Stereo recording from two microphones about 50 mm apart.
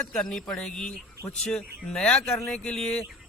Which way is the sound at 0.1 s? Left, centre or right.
Centre.